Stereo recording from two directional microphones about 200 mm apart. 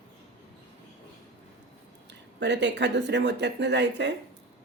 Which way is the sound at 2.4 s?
60° right (ahead or behind).